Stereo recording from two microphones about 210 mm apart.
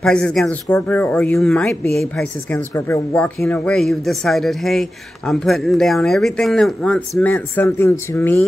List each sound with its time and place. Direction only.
0.0 s speech: 5° left (ahead or behind)
2.7 s speech: 15° left (ahead or behind)